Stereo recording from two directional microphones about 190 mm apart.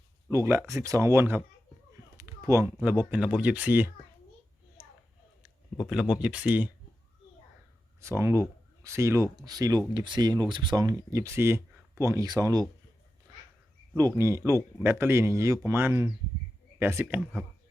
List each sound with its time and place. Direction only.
0.3 s speech: 15° right (ahead or behind)
2.1 s a sound: 15° right (ahead or behind)
3.0 s speech: 5° right (ahead or behind)
5.9 s speech: 5° right (ahead or behind)
8.0 s speech: 15° right (ahead or behind)
13.9 s speech: 15° right (ahead or behind)